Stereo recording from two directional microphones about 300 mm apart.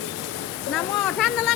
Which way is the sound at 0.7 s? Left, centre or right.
Centre.